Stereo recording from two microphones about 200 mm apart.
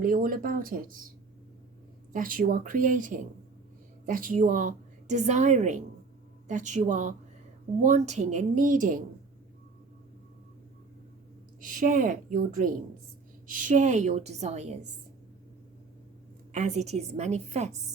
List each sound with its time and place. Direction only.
0.0 s a woman's voice: 45° right (ahead or behind)
2.1 s a woman's voice: 45° right (ahead or behind)
11.6 s a woman's voice: 40° right (ahead or behind)
16.5 s a woman's voice: 35° right (ahead or behind)